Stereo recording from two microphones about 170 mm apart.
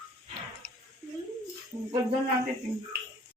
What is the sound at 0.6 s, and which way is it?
Squish, 5° left (ahead or behind).